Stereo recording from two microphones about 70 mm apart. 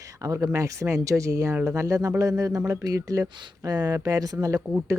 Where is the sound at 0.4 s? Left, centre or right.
Right.